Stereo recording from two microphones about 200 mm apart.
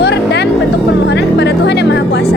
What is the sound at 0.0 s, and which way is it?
Music, 60° left (ahead or behind).